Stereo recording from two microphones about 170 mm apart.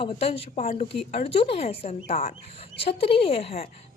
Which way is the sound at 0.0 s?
35° left (ahead or behind).